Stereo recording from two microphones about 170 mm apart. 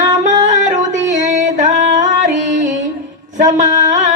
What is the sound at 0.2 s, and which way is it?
Music, 45° right (ahead or behind).